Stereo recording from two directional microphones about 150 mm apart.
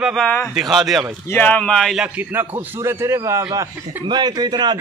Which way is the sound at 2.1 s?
15° right (ahead or behind).